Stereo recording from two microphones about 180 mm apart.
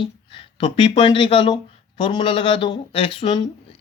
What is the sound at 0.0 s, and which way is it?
A man's voice, 30° left (ahead or behind).